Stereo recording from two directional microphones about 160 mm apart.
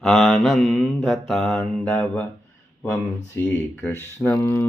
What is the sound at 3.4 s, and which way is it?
Speech, 10° left (ahead or behind).